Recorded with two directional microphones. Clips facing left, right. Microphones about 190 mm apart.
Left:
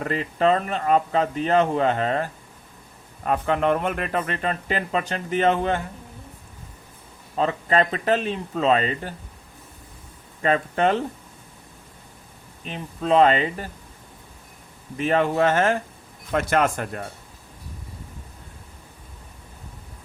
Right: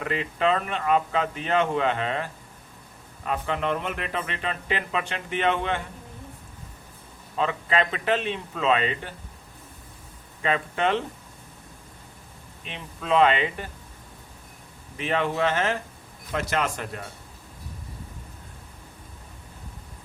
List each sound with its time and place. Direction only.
0.0 s a man's voice: 40° left (ahead or behind)
7.3 s speech: 40° left (ahead or behind)
10.4 s speech: 40° left (ahead or behind)
12.6 s speech: 40° left (ahead or behind)
14.9 s a man's voice: 45° left (ahead or behind)